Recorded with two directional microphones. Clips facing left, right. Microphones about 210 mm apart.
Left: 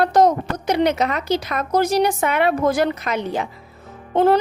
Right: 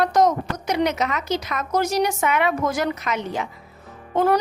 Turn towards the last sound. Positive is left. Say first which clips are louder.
# left 4 dB
turn(degrees=25)  # may be behind; listen again after turning